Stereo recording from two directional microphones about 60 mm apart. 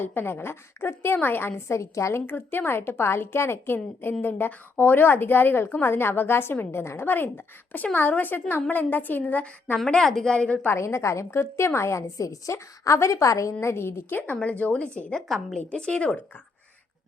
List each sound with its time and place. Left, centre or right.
0.0 s a woman's voice: left
2.2 s a woman's voice: left
9.7 s a woman's voice: centre
10.3 s a woman's voice: centre
10.7 s a woman's voice: left
14.6 s a woman's voice: left
15.1 s a woman's voice: centre
15.5 s a woman's voice: centre